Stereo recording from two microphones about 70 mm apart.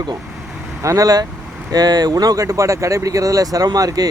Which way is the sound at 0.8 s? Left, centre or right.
Right.